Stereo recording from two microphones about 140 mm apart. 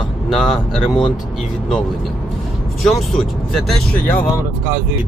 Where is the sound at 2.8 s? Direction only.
Centre (ahead or behind).